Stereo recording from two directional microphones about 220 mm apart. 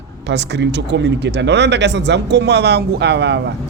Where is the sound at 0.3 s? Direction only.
50° right (ahead or behind).